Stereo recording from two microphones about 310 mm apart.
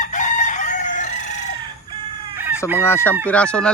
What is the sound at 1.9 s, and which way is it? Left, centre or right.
Music, centre.